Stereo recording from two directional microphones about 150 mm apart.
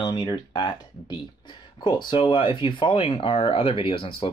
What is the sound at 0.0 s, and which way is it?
Speech, 30° left (ahead or behind).